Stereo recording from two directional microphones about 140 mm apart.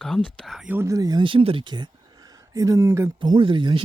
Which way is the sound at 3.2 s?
35° right (ahead or behind).